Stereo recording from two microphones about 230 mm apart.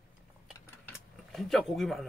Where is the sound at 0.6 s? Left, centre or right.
Centre.